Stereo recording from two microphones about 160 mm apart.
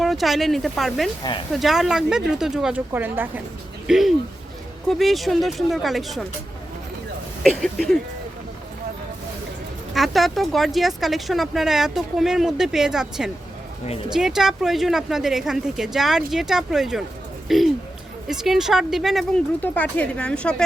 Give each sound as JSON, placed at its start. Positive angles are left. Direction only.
{"t": 0.0, "sound": "speech", "side_deg": 0}
{"t": 3.8, "sound": "speech", "side_deg": 0}
{"t": 7.6, "sound": "speech", "side_deg": 0}
{"t": 9.9, "sound": "speech", "side_deg": 0}